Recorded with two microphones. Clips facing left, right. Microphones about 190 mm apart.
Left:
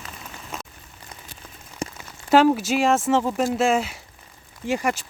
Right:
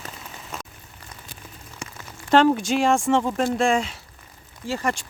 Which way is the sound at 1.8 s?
35° left (ahead or behind).